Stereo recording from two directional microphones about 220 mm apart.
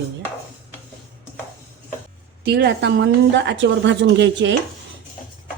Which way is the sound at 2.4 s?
50° right (ahead or behind).